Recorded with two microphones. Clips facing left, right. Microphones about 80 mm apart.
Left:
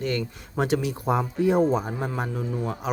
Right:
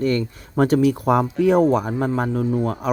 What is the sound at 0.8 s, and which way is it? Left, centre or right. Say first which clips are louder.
Speech: right 8 dB; right.